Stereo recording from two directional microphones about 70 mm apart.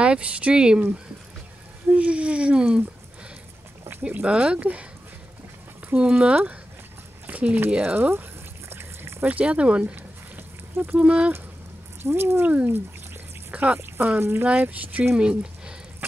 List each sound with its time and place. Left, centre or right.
0.0 s speech: centre
4.0 s speech: centre
5.9 s speech: centre
8.1 s a sound: right
9.3 s speech: centre
12.0 s speech: right
12.4 s speech: right
13.5 s a sound: right
13.7 s speech: right
14.4 s speech: right
16.0 s mechanisms: right